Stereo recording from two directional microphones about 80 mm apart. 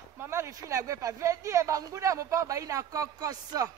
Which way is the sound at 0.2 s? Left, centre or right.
Right.